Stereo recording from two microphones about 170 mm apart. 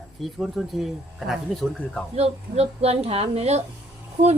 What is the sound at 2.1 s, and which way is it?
A woman's voice, 35° right (ahead or behind).